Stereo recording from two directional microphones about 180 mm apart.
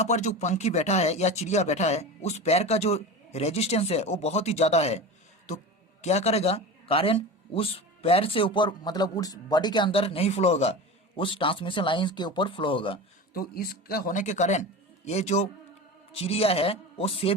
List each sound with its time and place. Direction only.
0.0 s speech: 40° left (ahead or behind)
13.3 s speech: 55° left (ahead or behind); by 17.3 s 30° left (ahead or behind)